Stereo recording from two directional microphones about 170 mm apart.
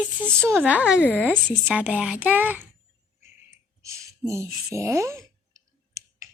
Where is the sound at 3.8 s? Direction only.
15° right (ahead or behind).